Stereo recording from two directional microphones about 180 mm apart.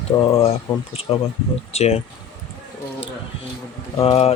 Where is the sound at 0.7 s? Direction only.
30° left (ahead or behind).